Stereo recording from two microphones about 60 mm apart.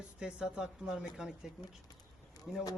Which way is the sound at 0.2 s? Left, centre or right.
Centre.